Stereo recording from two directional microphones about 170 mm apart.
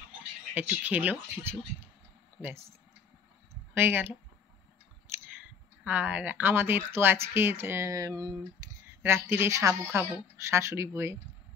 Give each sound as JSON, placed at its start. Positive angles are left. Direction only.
{"t": 0.6, "sound": "speech", "side_deg": -10}
{"t": 3.7, "sound": "speech", "side_deg": -10}
{"t": 5.0, "sound": "a sound", "side_deg": -15}
{"t": 5.9, "sound": "speech", "side_deg": -10}